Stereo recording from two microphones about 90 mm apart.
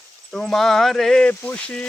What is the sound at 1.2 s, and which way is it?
Mantra, 15° left (ahead or behind).